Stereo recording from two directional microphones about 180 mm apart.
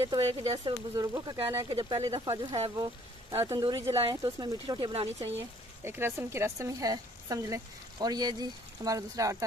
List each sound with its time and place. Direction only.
0.2 s speech: 35° right (ahead or behind)
0.9 s speech: 20° right (ahead or behind)
5.9 s speech: 15° right (ahead or behind)